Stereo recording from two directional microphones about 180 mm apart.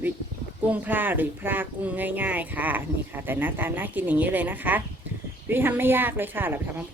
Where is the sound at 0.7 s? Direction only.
10° right (ahead or behind).